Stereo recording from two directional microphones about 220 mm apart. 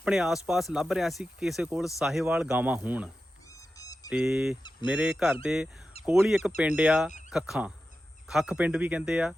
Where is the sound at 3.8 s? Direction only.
15° left (ahead or behind).